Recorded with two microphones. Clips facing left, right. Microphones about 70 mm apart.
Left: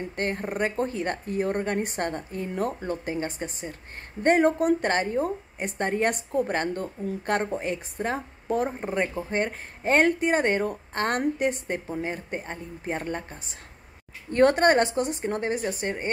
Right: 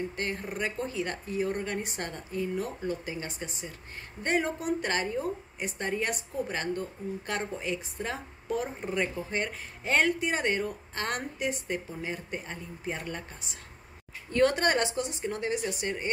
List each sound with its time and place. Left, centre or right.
0.1 s speech: left